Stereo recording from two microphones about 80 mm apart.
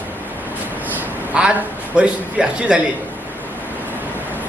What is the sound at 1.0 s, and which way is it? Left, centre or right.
A man's voice, centre.